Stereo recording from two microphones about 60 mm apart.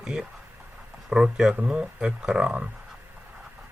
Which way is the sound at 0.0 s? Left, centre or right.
Centre.